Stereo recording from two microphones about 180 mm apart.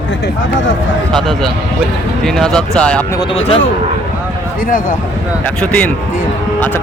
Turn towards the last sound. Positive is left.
turn(degrees=10)  # may be behind; listen again after turning